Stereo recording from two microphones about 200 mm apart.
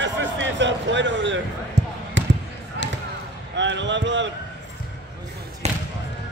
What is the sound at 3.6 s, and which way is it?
Speech, 65° right (ahead or behind).